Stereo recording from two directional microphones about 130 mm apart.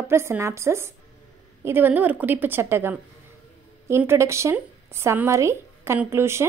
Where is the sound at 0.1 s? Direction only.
20° right (ahead or behind).